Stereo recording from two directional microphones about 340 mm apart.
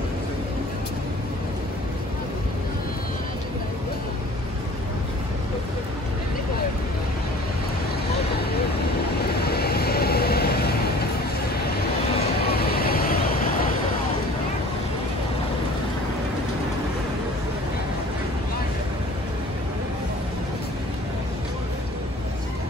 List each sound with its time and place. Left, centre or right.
9.4 s vehicle: left
11.7 s vehicle: left